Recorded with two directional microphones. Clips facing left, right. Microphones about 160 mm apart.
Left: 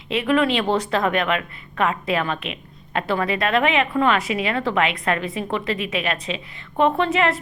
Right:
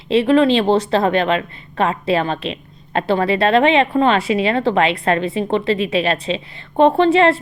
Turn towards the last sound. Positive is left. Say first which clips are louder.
# right 7 dB
turn(degrees=-30)  # may be behind; listen again after turning